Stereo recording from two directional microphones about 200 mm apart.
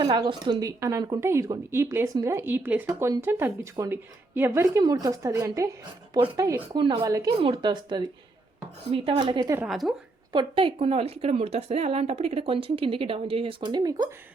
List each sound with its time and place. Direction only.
0.0 s a woman's voice: 20° right (ahead or behind)
9.6 s speech: centre (ahead or behind)
10.3 s a woman's voice: 25° right (ahead or behind)